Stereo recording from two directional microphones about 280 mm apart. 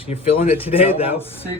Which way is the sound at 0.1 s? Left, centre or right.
Centre.